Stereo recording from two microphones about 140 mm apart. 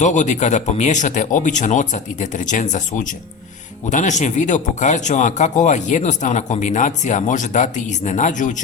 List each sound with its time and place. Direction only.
0.0 s speech: 60° left (ahead or behind)